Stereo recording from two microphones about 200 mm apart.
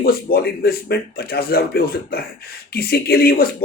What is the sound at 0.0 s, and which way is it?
Speech, 50° left (ahead or behind).